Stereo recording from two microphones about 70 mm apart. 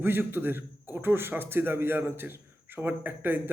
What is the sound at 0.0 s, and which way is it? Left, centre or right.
A man's voice, right.